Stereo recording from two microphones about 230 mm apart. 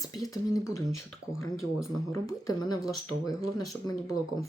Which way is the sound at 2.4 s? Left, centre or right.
Centre.